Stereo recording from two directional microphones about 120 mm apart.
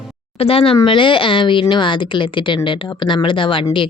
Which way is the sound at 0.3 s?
55° left (ahead or behind).